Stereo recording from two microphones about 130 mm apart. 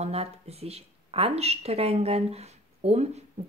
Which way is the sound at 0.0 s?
50° right (ahead or behind).